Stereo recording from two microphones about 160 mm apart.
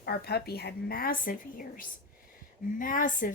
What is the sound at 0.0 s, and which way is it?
A woman's voice, 80° left.